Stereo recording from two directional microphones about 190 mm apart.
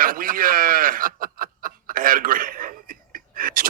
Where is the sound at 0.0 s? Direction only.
45° right (ahead or behind).